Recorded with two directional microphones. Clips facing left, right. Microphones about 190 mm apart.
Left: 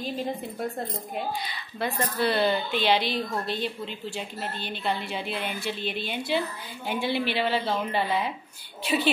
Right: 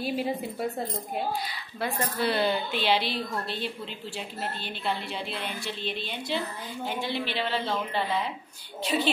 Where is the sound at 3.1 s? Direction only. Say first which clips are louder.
Left 3 dB; 45° left (ahead or behind).